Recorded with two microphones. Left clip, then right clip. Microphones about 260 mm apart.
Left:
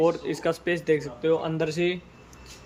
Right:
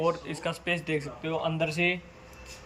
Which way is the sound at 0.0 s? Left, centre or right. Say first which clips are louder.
Left 5 dB; left.